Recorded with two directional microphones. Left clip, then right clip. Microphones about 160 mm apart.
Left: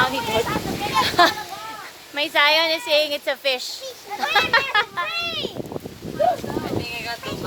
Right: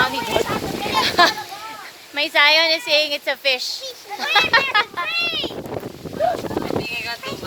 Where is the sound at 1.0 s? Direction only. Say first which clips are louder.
Right 1 dB; 15° right (ahead or behind).